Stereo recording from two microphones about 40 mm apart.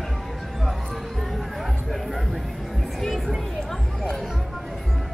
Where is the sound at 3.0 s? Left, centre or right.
Centre.